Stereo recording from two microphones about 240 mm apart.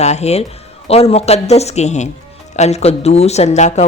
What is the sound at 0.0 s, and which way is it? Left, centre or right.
Speech, left.